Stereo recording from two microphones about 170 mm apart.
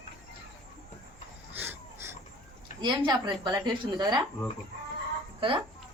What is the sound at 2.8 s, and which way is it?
Speech, 25° right (ahead or behind).